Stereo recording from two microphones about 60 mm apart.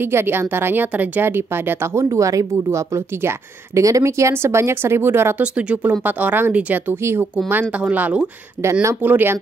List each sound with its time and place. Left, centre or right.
0.0 s speech: right
2.0 s a woman's voice: right
3.8 s speech: right
5.4 s speech: centre
7.0 s speech: right
7.7 s speech: right
9.0 s speech: right